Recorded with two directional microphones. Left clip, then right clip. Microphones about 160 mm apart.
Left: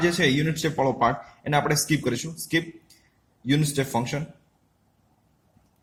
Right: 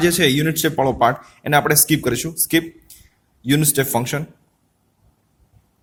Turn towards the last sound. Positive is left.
turn(degrees=-55)  # may be behind; listen again after turning